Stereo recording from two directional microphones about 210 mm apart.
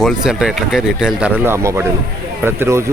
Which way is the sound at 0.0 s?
5° right (ahead or behind).